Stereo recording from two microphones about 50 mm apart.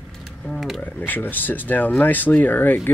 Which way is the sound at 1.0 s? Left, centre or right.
Left.